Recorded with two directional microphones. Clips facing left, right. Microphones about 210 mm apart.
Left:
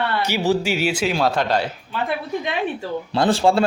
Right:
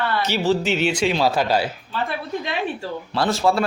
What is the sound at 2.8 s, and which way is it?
Speech, 25° left (ahead or behind).